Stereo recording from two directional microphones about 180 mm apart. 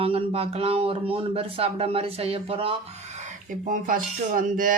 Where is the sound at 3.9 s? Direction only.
50° right (ahead or behind).